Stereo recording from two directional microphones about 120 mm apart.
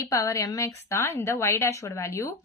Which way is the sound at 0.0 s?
25° left (ahead or behind).